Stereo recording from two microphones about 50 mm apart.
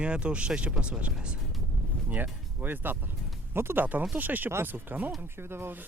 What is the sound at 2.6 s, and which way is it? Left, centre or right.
Speech, right.